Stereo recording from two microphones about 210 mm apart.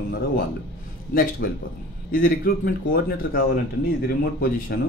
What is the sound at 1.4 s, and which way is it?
Speech, 45° left (ahead or behind).